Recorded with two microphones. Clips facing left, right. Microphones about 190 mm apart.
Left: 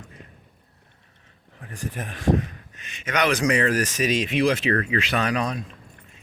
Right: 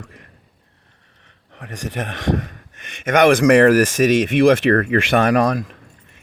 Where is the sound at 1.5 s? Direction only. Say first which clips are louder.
Right 6 dB; 90° right.